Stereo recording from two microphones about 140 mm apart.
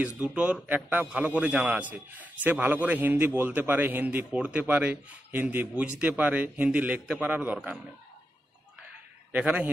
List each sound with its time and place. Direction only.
0.3 s a man's voice: 5° right (ahead or behind)
9.3 s a man's voice: 10° right (ahead or behind)